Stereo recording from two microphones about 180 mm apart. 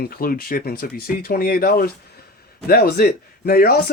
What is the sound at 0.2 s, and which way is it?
Speech, 55° left (ahead or behind).